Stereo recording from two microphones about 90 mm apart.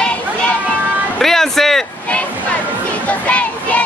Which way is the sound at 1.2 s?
5° left (ahead or behind).